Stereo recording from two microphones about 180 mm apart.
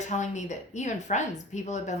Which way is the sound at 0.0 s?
40° left (ahead or behind).